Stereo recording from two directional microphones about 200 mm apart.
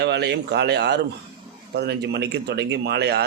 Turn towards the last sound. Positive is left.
turn(degrees=-55)  # may be behind; listen again after turning